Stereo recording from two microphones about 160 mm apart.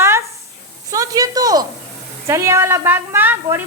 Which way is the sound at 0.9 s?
20° right (ahead or behind).